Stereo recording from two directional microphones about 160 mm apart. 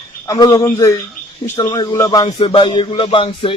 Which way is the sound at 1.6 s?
25° left (ahead or behind).